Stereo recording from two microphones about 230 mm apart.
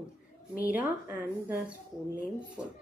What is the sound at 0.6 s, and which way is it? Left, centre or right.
Speech, centre.